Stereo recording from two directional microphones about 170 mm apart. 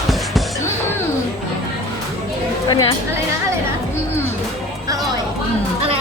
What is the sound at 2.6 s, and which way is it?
Speech, 25° left (ahead or behind).